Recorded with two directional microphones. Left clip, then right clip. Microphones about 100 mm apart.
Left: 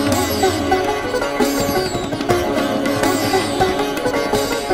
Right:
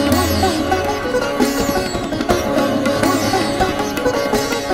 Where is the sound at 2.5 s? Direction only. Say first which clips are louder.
Right 2 dB; 35° right (ahead or behind).